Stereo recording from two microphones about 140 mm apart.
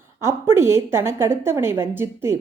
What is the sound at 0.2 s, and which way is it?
A woman's voice, 20° right (ahead or behind).